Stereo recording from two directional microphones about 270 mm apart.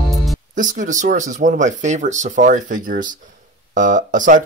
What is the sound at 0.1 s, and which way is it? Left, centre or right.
Music, centre.